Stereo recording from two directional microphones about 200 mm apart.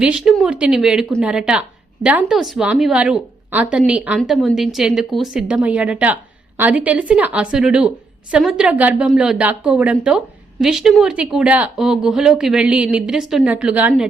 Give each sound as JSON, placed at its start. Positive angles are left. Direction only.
{"t": 0.0, "sound": "a woman's voice", "side_deg": -5}